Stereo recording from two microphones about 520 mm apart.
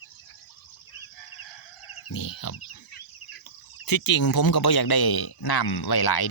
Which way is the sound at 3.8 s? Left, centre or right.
Left.